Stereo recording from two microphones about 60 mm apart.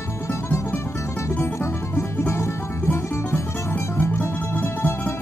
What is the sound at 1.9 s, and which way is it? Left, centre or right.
Music, left.